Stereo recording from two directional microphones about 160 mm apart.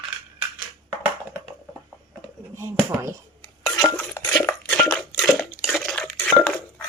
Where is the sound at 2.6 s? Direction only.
15° right (ahead or behind).